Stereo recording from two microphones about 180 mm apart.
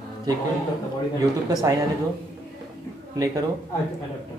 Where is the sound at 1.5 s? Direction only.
20° right (ahead or behind).